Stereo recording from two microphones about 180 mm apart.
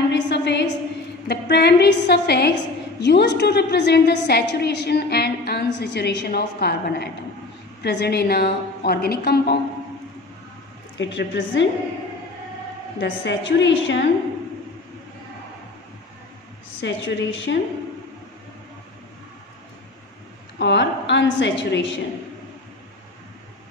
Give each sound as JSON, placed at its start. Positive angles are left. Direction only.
{"t": 0.1, "sound": "a sound", "side_deg": 75}
{"t": 1.2, "sound": "a woman's voice", "side_deg": 65}
{"t": 11.0, "sound": "a woman's voice", "side_deg": 85}
{"t": 13.0, "sound": "a woman's voice", "side_deg": 80}
{"t": 16.8, "sound": "a woman's voice", "side_deg": 90}
{"t": 20.5, "sound": "a woman's voice", "side_deg": 75}